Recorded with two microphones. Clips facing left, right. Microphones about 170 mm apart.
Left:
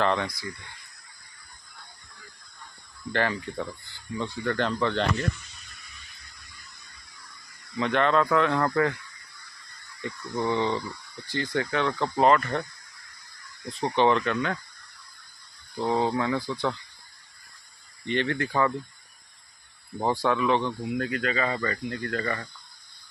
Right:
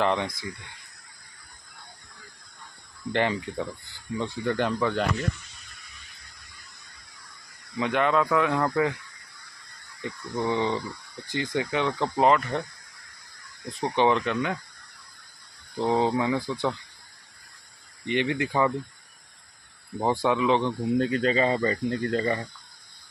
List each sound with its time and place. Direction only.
0.0 s speech: 15° right (ahead or behind)
3.1 s speech: 20° right (ahead or behind)
7.8 s speech: 10° right (ahead or behind)
10.0 s speech: 15° right (ahead or behind)
13.7 s speech: 15° right (ahead or behind)
15.8 s speech: 20° right (ahead or behind)
18.0 s speech: 15° right (ahead or behind)
20.0 s speech: 10° right (ahead or behind)
21.1 s speech: 30° right (ahead or behind)